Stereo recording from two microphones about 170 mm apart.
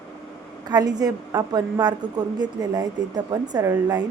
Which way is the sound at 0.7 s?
25° right (ahead or behind).